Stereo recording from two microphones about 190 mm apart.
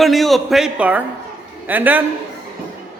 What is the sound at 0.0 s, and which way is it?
A man's voice, centre (ahead or behind).